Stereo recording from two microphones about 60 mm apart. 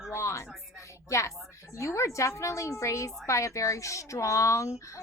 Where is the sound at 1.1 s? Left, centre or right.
Left.